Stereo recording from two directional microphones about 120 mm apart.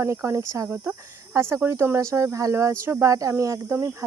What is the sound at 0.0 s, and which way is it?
Speech, 20° right (ahead or behind).